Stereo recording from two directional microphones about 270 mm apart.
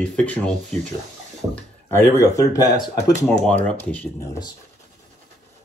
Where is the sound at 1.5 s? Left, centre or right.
Centre.